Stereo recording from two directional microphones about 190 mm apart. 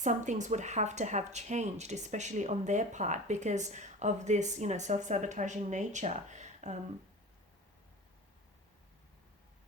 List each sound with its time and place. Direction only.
0.0 s speech: 40° right (ahead or behind)